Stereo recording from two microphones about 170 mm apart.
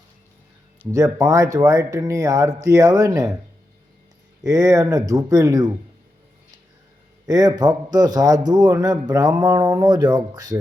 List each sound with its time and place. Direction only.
0.9 s a man's voice: 20° right (ahead or behind)
4.4 s a man's voice: 20° right (ahead or behind)
7.3 s a man's voice: 25° right (ahead or behind)